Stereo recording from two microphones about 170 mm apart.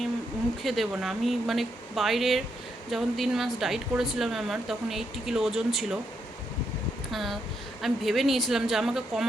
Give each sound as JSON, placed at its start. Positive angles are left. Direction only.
{"t": 0.6, "sound": "speech", "side_deg": 0}
{"t": 7.1, "sound": "speech", "side_deg": 0}